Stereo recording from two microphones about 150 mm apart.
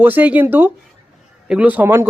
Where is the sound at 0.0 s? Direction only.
10° right (ahead or behind).